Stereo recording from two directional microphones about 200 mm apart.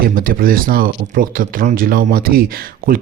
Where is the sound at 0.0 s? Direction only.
45° right (ahead or behind).